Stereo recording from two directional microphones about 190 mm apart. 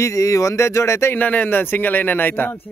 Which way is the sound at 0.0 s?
15° left (ahead or behind).